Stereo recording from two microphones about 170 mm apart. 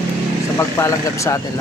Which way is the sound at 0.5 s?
15° left (ahead or behind).